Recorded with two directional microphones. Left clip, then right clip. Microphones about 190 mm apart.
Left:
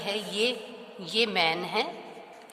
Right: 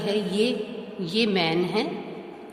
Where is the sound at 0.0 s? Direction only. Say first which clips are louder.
Right 4 dB; 35° left (ahead or behind).